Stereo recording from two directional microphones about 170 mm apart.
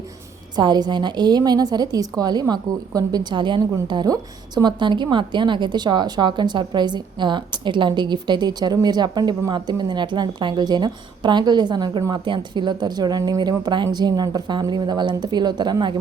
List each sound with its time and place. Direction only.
0.5 s a woman's voice: 25° right (ahead or behind)